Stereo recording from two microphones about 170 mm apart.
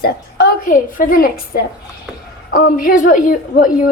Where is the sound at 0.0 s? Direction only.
80° left.